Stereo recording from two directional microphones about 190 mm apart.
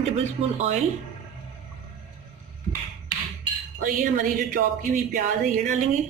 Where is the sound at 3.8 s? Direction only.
45° right (ahead or behind).